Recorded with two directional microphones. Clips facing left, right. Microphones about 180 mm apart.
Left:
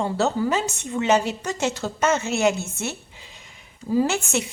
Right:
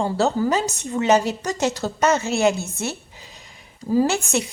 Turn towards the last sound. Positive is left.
turn(degrees=-35)  # may be behind; listen again after turning